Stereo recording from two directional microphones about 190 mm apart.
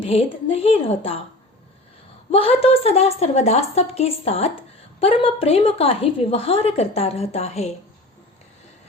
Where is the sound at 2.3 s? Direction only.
30° left (ahead or behind).